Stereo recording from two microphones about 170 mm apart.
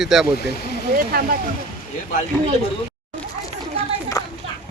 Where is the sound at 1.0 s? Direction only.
60° right (ahead or behind).